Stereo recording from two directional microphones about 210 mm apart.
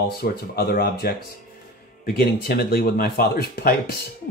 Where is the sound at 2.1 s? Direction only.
50° left (ahead or behind).